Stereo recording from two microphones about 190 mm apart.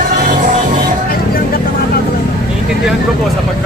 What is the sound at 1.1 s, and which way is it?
Vehicle, 50° left (ahead or behind).